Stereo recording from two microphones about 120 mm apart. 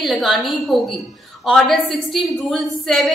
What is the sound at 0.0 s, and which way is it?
A woman's voice, centre (ahead or behind).